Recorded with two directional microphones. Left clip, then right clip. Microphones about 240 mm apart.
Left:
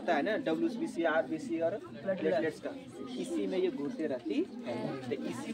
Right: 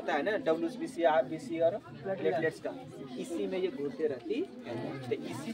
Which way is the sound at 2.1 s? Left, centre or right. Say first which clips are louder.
Left 2 dB; left.